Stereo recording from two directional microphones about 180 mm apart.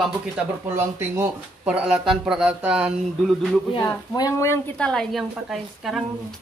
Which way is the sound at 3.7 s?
20° left (ahead or behind).